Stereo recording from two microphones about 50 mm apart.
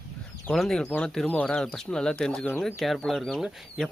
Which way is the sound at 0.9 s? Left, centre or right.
Centre.